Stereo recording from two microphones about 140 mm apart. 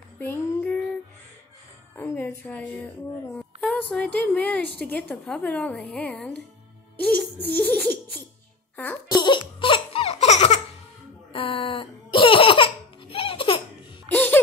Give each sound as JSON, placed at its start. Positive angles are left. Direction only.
{"t": 0.2, "sound": "child singing", "side_deg": 15}
{"t": 2.0, "sound": "music", "side_deg": 15}
{"t": 3.3, "sound": "a woman's voice", "side_deg": 10}
{"t": 9.1, "sound": "baby laughter", "side_deg": 35}
{"t": 11.3, "sound": "laughter", "side_deg": 40}
{"t": 14.1, "sound": "music", "side_deg": 10}